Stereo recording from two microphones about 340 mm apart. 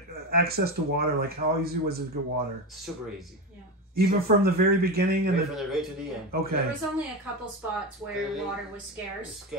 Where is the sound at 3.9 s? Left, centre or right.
Right.